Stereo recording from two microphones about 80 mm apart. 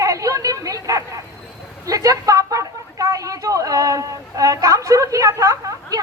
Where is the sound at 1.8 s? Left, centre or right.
Right.